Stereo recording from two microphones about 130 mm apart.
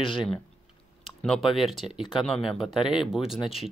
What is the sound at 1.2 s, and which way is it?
Speech, centre (ahead or behind).